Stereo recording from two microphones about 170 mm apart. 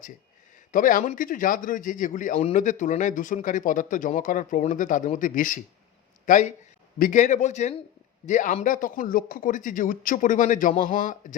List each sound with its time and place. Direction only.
0.7 s a man's voice: 50° left (ahead or behind)